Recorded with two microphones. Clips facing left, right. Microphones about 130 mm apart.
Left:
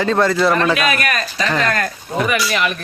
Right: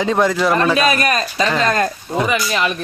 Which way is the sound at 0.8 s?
30° right (ahead or behind).